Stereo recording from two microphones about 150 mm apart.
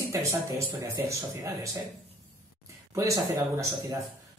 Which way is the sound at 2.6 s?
20° right (ahead or behind).